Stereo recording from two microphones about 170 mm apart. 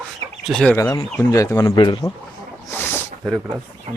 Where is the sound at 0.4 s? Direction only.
5° left (ahead or behind).